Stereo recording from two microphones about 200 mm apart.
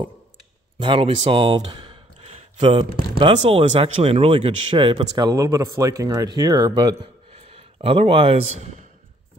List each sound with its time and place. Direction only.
0.7 s speech: 25° right (ahead or behind)